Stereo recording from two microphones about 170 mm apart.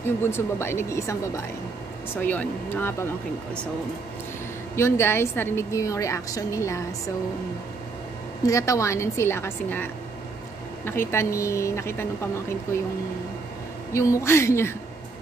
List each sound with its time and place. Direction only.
0.0 s a woman's voice: 15° left (ahead or behind)
4.7 s a woman's voice: 15° left (ahead or behind)
8.5 s a woman's voice: 20° left (ahead or behind)
10.9 s a woman's voice: 15° left (ahead or behind)
13.9 s a woman's voice: 15° left (ahead or behind)